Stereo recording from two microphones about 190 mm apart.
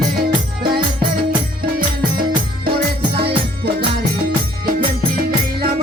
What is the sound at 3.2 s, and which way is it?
Music, 55° right (ahead or behind).